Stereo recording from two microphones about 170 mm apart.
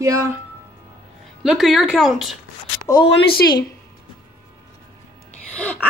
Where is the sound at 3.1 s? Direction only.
80° left.